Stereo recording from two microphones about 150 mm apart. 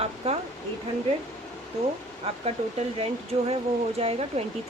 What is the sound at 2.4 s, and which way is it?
Speech, 45° right (ahead or behind).